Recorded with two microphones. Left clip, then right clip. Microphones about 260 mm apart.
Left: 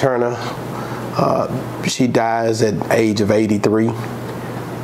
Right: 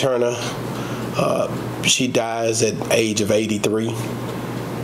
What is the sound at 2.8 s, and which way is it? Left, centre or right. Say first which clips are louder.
Speech: left 3 dB; left.